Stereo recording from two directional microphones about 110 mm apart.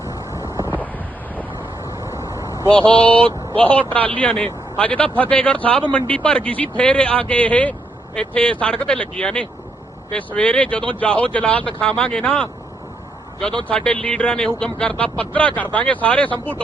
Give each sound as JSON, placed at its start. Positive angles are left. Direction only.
{"t": 0.0, "sound": "a sound", "side_deg": -25}
{"t": 1.4, "sound": "vehicle", "side_deg": -20}
{"t": 2.6, "sound": "speech", "side_deg": -50}
{"t": 3.2, "sound": "a man's voice", "side_deg": 15}
{"t": 13.7, "sound": "a man's voice", "side_deg": 10}